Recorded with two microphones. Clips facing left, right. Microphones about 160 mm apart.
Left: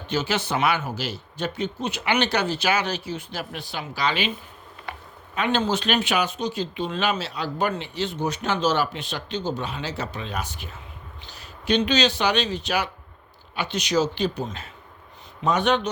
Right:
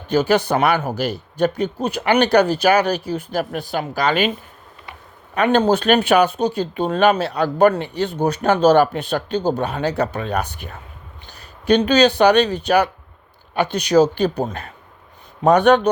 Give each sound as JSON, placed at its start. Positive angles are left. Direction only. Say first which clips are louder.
{"t": 0.1, "sound": "speech", "louder": "right 9 dB", "side_deg": -50}
{"t": 5.3, "sound": "speech", "louder": "right 8 dB", "side_deg": -55}
{"t": 11.9, "sound": "speech", "louder": "right 9 dB", "side_deg": -55}